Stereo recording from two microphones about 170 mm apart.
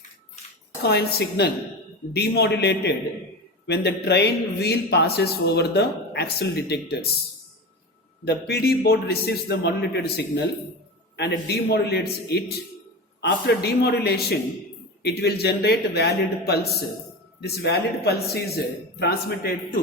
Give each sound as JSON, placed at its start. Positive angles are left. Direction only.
{"t": 0.8, "sound": "speech", "side_deg": 70}
{"t": 8.2, "sound": "speech", "side_deg": 75}
{"t": 11.2, "sound": "speech", "side_deg": 70}
{"t": 13.6, "sound": "speech", "side_deg": 75}